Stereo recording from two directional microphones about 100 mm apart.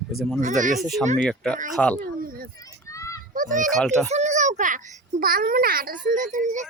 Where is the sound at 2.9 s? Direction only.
30° left (ahead or behind).